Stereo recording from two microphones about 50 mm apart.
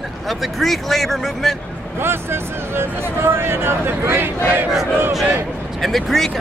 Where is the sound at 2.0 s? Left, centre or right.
Right.